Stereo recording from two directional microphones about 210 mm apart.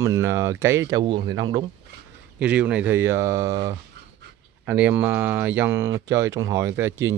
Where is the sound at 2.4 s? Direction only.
5° right (ahead or behind).